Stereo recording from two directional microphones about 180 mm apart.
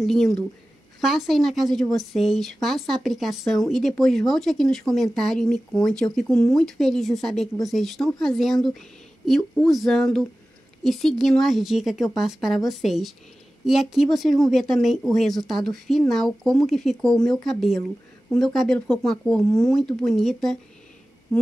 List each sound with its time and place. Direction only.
0.0 s speech: centre (ahead or behind)